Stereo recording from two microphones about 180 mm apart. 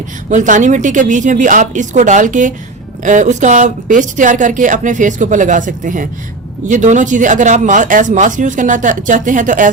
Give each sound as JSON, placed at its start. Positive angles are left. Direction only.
{"t": 0.3, "sound": "speech", "side_deg": -45}